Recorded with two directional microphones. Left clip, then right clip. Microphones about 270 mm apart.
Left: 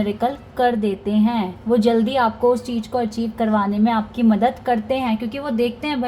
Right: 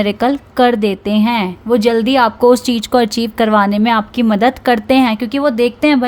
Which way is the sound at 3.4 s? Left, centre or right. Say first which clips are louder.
Right 8 dB; right.